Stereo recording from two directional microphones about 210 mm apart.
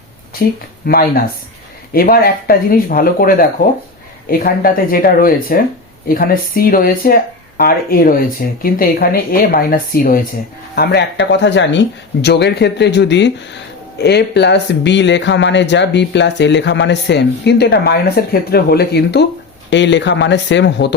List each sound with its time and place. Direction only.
0.4 s speech: 50° left (ahead or behind)